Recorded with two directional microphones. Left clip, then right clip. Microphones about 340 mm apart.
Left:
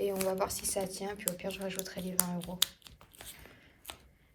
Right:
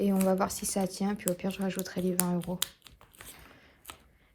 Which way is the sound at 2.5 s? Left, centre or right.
Centre.